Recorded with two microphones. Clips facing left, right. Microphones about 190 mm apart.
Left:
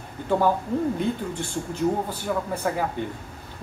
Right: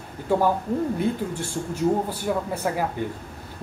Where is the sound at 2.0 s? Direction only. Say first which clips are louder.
Right 1 dB; 10° right (ahead or behind).